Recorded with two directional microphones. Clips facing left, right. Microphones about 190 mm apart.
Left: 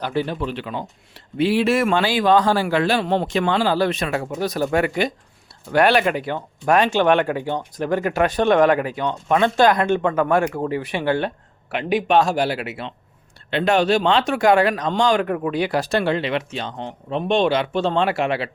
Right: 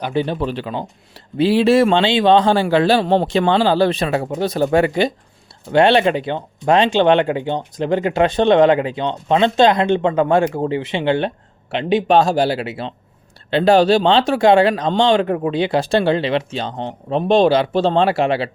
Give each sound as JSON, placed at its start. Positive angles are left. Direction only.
{"t": 0.0, "sound": "speech", "side_deg": -20}
{"t": 0.3, "sound": "speech", "side_deg": -35}